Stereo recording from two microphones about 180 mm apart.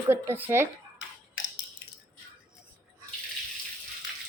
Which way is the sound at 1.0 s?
90° left.